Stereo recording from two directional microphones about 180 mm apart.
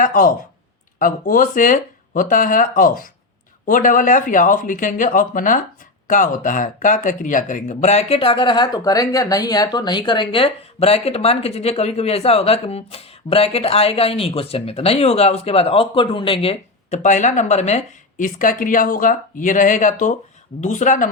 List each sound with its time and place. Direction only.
0.0 s speech: 50° left (ahead or behind)